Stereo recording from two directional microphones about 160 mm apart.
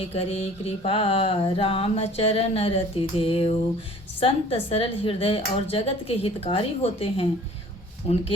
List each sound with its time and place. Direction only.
0.0 s mantra: 35° left (ahead or behind)